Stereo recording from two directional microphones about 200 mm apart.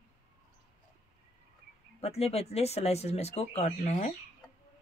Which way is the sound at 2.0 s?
30° left (ahead or behind).